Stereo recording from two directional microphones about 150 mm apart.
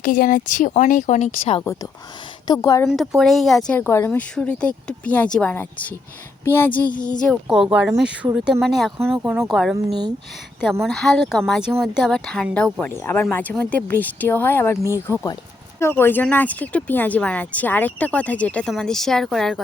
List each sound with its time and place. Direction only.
0.0 s a woman's voice: 65° left (ahead or behind); by 1.5 s 50° left (ahead or behind)
1.6 s a woman's voice: 20° left (ahead or behind)
2.9 s speech: centre (ahead or behind)
3.7 s speech: 15° left (ahead or behind)
6.9 s a woman's voice: 30° left (ahead or behind)
7.7 s speech: 5° right (ahead or behind)
9.1 s speech: 15° right (ahead or behind)
9.5 s speech: centre (ahead or behind)
9.7 s speech: 25° right (ahead or behind)
10.8 s speech: centre (ahead or behind)
12.8 s a woman's voice: 15° left (ahead or behind)